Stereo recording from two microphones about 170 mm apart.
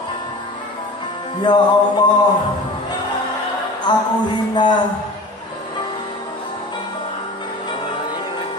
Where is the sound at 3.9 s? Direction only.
25° left (ahead or behind).